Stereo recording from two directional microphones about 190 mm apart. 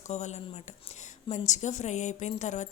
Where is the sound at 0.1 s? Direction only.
35° left (ahead or behind).